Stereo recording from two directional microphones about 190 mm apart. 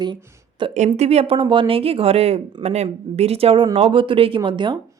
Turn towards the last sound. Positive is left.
turn(degrees=-25)  # may be behind; listen again after turning